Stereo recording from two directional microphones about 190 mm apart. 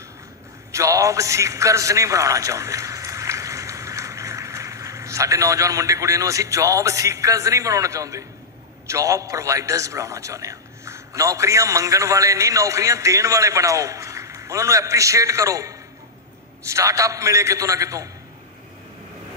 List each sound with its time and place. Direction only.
0.7 s a man's voice: 15° right (ahead or behind)